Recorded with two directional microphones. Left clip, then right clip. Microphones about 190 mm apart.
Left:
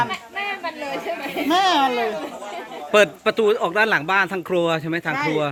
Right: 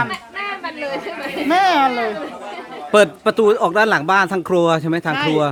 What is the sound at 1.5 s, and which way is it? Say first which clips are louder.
Speech: right 3 dB; 25° right (ahead or behind).